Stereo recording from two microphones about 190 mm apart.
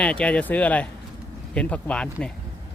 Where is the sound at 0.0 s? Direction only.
5° left (ahead or behind).